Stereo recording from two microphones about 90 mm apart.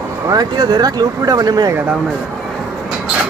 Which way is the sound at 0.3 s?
50° right (ahead or behind).